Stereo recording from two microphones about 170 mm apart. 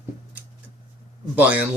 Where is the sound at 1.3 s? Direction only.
10° right (ahead or behind).